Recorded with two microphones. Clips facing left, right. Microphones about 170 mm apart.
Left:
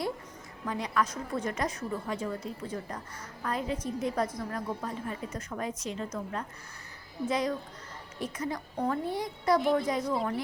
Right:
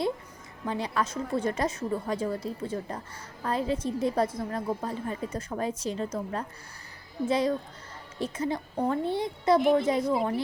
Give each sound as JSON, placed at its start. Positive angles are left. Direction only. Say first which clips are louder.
{"t": 0.6, "sound": "a woman's voice", "louder": "right 1 dB", "side_deg": -30}